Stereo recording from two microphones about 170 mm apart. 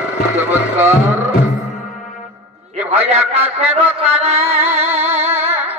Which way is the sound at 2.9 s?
35° right (ahead or behind).